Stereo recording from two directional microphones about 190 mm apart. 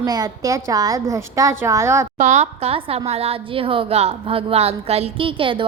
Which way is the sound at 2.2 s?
35° right (ahead or behind).